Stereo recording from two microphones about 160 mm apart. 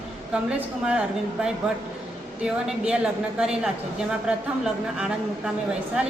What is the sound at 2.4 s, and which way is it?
Speech, 5° right (ahead or behind).